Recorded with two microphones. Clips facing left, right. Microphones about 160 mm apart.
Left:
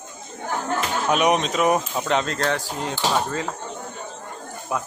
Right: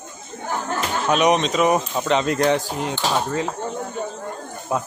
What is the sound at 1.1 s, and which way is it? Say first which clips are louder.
Speech: right 2 dB; 5° left (ahead or behind).